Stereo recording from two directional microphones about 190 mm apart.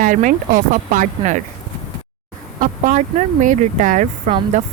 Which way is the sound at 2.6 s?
45° right (ahead or behind).